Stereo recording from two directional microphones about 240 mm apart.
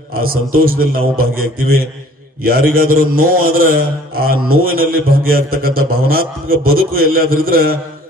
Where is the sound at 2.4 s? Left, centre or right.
Right.